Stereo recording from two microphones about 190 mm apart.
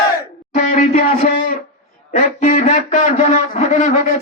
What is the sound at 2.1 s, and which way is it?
A man's voice, 40° left (ahead or behind).